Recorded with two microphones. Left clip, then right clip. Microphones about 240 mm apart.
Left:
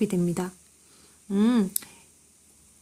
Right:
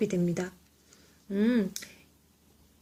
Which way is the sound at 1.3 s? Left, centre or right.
Left.